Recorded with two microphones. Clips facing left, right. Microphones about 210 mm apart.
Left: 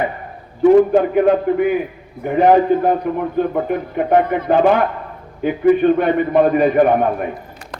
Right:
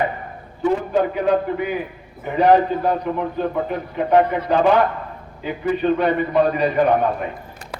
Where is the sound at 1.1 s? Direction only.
50° left (ahead or behind).